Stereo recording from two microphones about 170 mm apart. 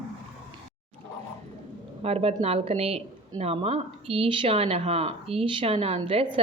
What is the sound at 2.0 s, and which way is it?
A woman's voice, 35° right (ahead or behind).